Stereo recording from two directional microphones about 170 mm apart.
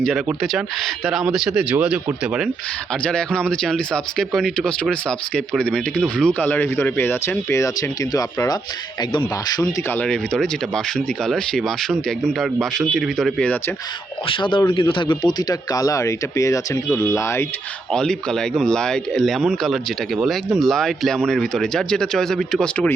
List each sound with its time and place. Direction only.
0.0 s speech: centre (ahead or behind)
3.0 s speech: 5° left (ahead or behind); by 9.6 s 25° left (ahead or behind)
9.9 s speech: 5° left (ahead or behind)
14.3 s speech: 30° left (ahead or behind)
17.9 s speech: 5° left (ahead or behind)